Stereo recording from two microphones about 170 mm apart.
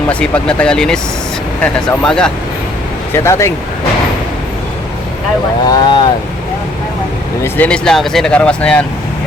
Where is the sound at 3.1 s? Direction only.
15° left (ahead or behind).